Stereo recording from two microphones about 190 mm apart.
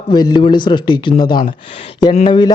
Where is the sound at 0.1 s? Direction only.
20° left (ahead or behind).